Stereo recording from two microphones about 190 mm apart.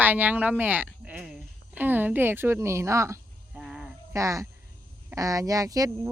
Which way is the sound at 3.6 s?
Centre (ahead or behind).